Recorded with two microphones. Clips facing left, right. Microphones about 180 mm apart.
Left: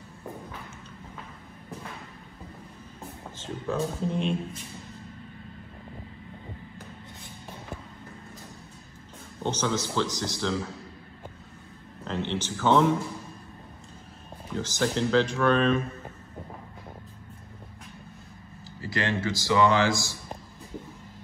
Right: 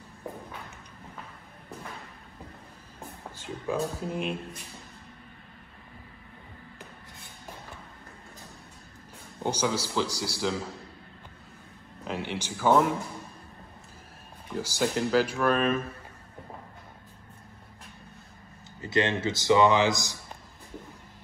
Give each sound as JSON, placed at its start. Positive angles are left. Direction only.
{"t": 3.3, "sound": "speech", "side_deg": -10}
{"t": 9.4, "sound": "speech", "side_deg": -10}
{"t": 12.0, "sound": "speech", "side_deg": -10}
{"t": 14.5, "sound": "speech", "side_deg": -10}
{"t": 18.8, "sound": "a man's voice", "side_deg": -20}